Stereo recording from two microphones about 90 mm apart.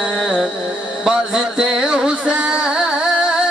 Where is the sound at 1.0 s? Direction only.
5° right (ahead or behind).